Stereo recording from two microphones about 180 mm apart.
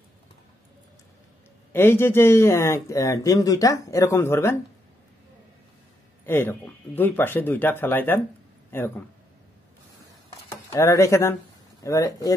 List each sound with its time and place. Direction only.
1.7 s speech: 15° left (ahead or behind)
6.2 s speech: 10° left (ahead or behind)
10.7 s speech: 15° left (ahead or behind)